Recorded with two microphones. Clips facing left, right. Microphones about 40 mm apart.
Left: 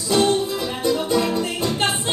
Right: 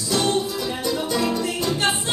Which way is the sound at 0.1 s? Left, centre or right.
Left.